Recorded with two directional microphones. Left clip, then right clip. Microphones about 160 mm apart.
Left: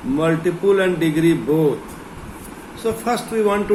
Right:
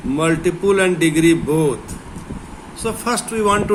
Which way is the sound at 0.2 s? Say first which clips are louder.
Right 1 dB; 80° right.